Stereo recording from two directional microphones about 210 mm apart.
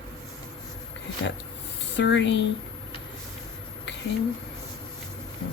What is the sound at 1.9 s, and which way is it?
Speech, 60° left (ahead or behind).